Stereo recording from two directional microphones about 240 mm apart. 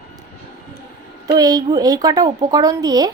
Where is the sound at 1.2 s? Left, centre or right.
Centre.